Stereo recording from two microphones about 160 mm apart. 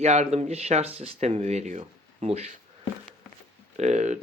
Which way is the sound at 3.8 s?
45° right (ahead or behind).